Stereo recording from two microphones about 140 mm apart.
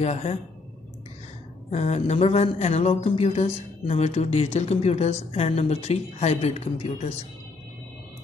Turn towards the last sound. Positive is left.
turn(degrees=45)  # may be behind; listen again after turning